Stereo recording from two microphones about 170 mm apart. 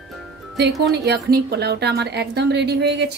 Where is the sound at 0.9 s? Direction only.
80° right.